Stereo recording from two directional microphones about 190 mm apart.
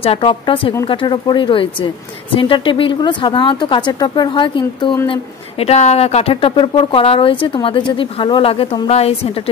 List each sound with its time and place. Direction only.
0.0 s speech: 30° left (ahead or behind)